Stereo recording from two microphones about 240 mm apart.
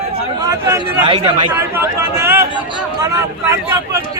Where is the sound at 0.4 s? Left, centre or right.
Centre.